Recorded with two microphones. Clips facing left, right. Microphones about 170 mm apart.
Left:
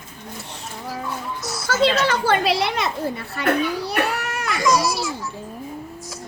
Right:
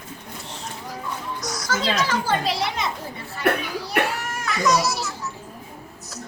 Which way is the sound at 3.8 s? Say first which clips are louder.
Left 1 dB; 65° left (ahead or behind).